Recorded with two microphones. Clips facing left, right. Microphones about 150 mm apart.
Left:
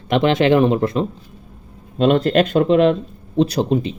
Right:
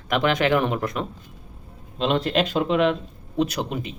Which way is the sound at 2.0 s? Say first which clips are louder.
Left 7 dB; 50° left (ahead or behind).